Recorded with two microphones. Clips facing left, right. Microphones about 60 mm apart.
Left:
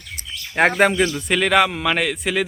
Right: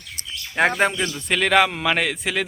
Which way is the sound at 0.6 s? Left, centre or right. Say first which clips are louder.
Left 4 dB; centre.